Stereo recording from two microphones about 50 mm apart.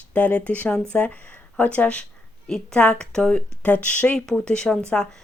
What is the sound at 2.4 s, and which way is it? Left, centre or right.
Speech, centre.